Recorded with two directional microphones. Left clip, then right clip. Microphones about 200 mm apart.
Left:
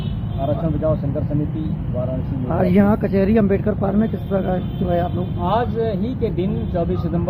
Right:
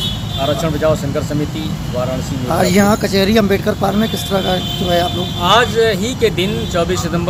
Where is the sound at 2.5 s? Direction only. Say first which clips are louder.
Right 5 dB; 15° right (ahead or behind).